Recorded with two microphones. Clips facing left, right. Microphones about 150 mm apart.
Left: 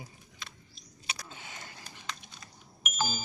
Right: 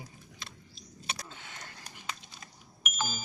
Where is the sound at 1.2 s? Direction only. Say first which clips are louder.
Left 1 dB; 5° left (ahead or behind).